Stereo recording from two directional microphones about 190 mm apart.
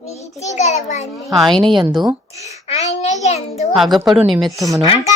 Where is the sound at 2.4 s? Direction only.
35° left (ahead or behind).